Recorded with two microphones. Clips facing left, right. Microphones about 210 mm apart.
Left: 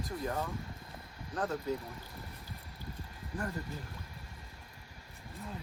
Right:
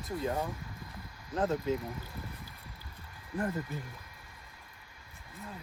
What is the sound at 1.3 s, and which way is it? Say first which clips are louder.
Speech: right 4 dB; 25° right (ahead or behind).